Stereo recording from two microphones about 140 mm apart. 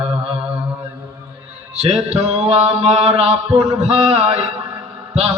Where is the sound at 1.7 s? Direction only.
50° right (ahead or behind).